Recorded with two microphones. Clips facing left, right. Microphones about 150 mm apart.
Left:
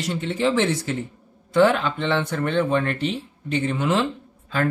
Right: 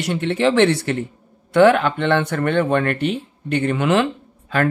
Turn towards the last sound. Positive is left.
turn(degrees=-70)  # may be behind; listen again after turning